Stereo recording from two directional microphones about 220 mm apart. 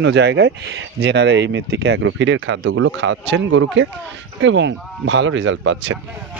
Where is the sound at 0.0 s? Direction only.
50° right (ahead or behind).